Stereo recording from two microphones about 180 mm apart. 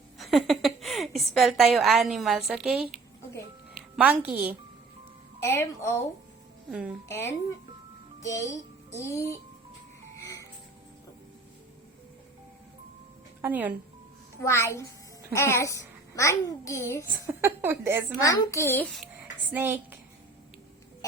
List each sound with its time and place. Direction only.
0.2 s a woman's voice: centre (ahead or behind)
5.4 s a child's voice: 15° left (ahead or behind)
6.7 s a woman's voice: 5° right (ahead or behind)
7.1 s a child's voice: 15° left (ahead or behind)
8.2 s music: 20° left (ahead or behind)
13.4 s a woman's voice: 10° right (ahead or behind)
14.4 s a child's voice: 15° left (ahead or behind)
17.1 s a woman's voice: 15° right (ahead or behind)
18.2 s a child's voice: 20° left (ahead or behind)
19.5 s a woman's voice: 10° right (ahead or behind)